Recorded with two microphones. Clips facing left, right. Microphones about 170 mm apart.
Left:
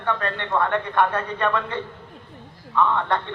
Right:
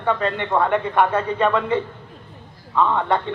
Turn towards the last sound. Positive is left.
turn(degrees=-15)  # may be behind; listen again after turning